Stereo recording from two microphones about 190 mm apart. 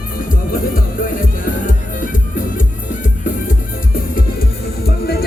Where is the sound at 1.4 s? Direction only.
45° left (ahead or behind).